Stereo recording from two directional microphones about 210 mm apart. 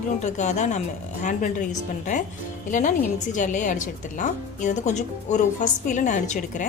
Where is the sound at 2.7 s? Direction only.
35° left (ahead or behind).